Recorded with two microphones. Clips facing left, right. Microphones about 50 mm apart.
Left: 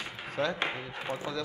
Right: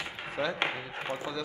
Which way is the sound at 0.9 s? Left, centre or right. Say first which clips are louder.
Even; right.